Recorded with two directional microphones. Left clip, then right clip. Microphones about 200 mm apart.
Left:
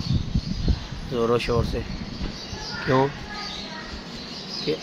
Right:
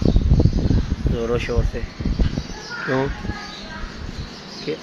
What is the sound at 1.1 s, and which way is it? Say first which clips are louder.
Speech: left 1 dB; 20° left (ahead or behind).